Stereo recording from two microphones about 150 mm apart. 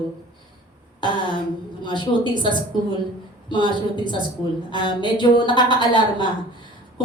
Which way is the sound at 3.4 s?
30° left (ahead or behind).